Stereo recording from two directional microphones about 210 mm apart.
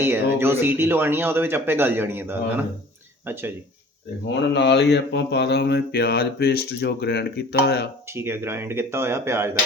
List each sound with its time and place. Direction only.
0.0 s speech: 10° right (ahead or behind)
4.4 s mantra: 55° left (ahead or behind)
8.1 s speech: 10° right (ahead or behind)